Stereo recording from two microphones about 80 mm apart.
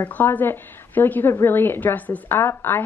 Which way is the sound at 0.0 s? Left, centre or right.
Left.